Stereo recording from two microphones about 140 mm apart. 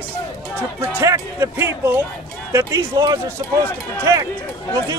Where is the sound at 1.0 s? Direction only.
20° right (ahead or behind).